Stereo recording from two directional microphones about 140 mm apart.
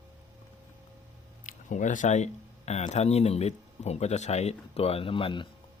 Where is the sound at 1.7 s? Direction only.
65° left (ahead or behind); by 5.5 s 35° left (ahead or behind).